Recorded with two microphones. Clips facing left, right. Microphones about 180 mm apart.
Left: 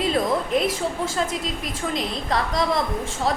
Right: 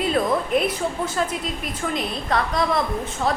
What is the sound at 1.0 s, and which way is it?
Speech, 90° left.